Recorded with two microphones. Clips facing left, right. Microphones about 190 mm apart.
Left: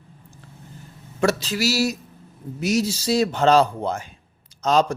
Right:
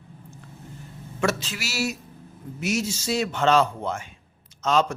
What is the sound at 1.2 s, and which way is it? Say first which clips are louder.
A man's voice: left 5 dB; 35° left (ahead or behind).